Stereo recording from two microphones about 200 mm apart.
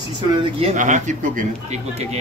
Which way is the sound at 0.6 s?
40° right (ahead or behind).